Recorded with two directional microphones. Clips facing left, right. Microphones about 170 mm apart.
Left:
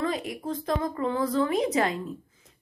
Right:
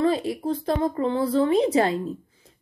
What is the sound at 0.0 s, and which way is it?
A woman's voice, 30° right (ahead or behind).